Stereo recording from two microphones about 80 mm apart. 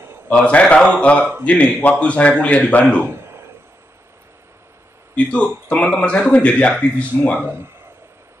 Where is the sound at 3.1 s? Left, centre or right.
Right.